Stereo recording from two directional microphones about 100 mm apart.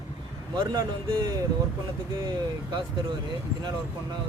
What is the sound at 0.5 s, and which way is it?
Speech, 40° right (ahead or behind).